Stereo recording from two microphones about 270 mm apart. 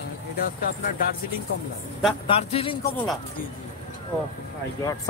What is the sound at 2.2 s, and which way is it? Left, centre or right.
Speech, left.